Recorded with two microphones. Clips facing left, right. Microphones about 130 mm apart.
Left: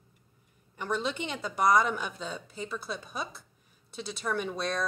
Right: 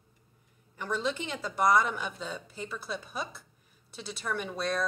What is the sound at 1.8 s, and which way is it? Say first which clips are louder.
A woman's voice: left 2 dB; centre (ahead or behind).